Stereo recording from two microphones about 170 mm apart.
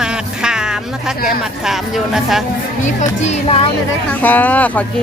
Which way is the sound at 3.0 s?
40° left (ahead or behind).